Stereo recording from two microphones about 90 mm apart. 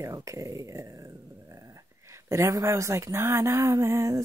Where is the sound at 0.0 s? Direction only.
35° right (ahead or behind).